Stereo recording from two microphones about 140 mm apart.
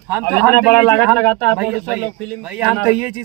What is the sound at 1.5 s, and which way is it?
A man's voice, 5° right (ahead or behind).